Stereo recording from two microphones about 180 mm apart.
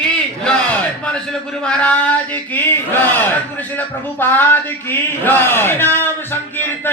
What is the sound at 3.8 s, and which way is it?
Speech, 10° left (ahead or behind).